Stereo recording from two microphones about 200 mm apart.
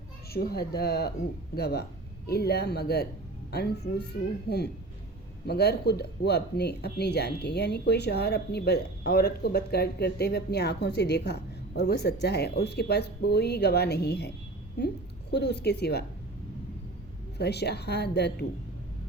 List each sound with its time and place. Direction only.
0.3 s speech: 50° left (ahead or behind)
17.3 s speech: 55° left (ahead or behind)